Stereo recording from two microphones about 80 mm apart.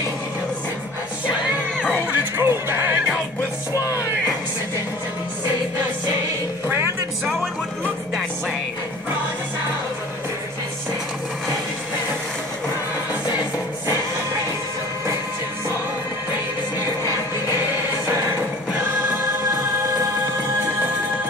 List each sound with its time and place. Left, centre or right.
2.0 s music: right